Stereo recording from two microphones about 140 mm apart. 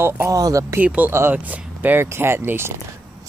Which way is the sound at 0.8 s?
15° right (ahead or behind).